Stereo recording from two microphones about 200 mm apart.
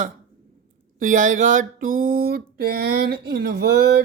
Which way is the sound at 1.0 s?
40° right (ahead or behind).